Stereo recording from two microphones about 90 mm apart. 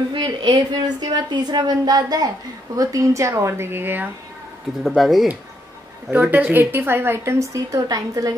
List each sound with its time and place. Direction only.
0.1 s a woman's voice: 60° right (ahead or behind); by 4.1 s 25° right (ahead or behind)
4.8 s speech: centre (ahead or behind)
6.1 s a woman's voice: 20° right (ahead or behind); by 8.4 s 45° right (ahead or behind)